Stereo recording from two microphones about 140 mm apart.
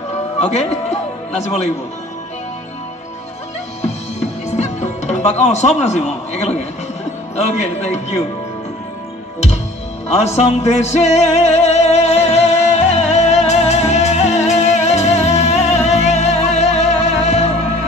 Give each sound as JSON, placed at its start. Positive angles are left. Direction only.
{"t": 0.4, "sound": "a man's voice", "side_deg": 55}
{"t": 4.5, "sound": "a man's voice", "side_deg": 55}
{"t": 10.1, "sound": "music", "side_deg": 50}